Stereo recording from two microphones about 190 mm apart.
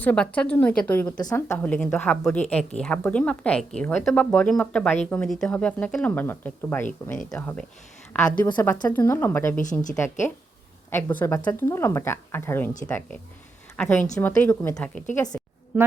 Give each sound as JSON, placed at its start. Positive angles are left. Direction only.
{"t": 0.0, "sound": "speech", "side_deg": 5}
{"t": 1.1, "sound": "speech", "side_deg": 20}
{"t": 1.5, "sound": "speech", "side_deg": 5}
{"t": 8.5, "sound": "speech", "side_deg": 15}
{"t": 13.7, "sound": "a woman's voice", "side_deg": 10}
{"t": 15.3, "sound": "a sound", "side_deg": 10}
{"t": 15.7, "sound": "speech", "side_deg": -10}